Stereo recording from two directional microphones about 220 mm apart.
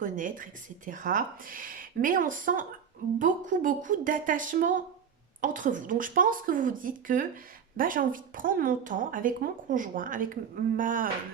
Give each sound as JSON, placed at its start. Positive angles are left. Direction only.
{"t": 0.0, "sound": "speech", "side_deg": -35}